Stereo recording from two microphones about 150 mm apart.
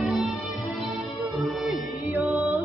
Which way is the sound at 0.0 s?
Centre (ahead or behind).